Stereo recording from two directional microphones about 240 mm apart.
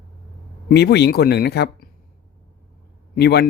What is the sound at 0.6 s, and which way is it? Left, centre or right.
Speech, left.